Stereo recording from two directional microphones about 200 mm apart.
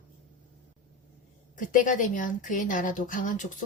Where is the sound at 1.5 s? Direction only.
40° left (ahead or behind).